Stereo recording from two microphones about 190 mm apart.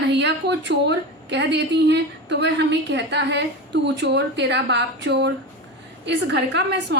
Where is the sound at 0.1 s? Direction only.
65° right (ahead or behind).